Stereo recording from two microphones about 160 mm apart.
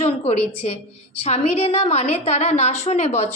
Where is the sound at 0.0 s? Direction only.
40° left (ahead or behind).